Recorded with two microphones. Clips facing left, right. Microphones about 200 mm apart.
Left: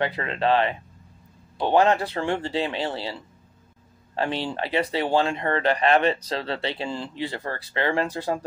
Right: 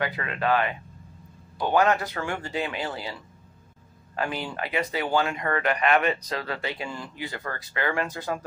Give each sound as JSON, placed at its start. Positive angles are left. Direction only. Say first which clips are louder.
{"t": 0.0, "sound": "speech", "louder": "left 3 dB", "side_deg": 25}